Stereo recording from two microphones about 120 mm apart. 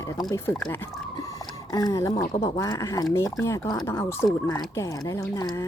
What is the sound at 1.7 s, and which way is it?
Speech, 30° left (ahead or behind).